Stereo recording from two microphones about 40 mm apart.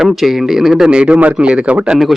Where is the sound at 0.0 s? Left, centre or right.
Centre; by 2.0 s right.